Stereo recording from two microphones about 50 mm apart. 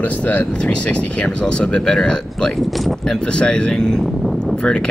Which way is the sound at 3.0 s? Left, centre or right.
Centre.